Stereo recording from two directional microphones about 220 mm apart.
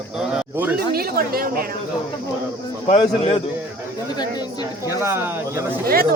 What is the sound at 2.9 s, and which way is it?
A man's voice, 25° left (ahead or behind).